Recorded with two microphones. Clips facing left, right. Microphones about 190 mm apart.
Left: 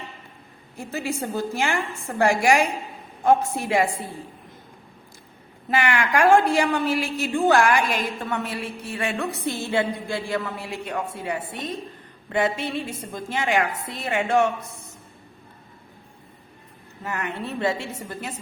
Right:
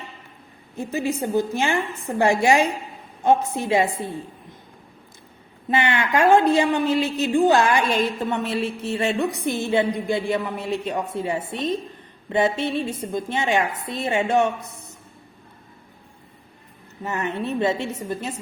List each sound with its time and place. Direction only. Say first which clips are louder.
0.8 s a woman's voice: right 4 dB; 20° right (ahead or behind)
5.7 s a woman's voice: right 1 dB; 25° right (ahead or behind)
17.0 s a woman's voice: right 4 dB; 20° right (ahead or behind)